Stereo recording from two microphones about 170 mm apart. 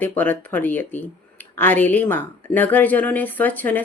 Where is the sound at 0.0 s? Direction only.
10° left (ahead or behind).